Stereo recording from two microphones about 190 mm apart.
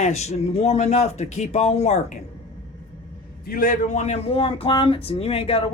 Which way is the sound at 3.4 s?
50° left (ahead or behind).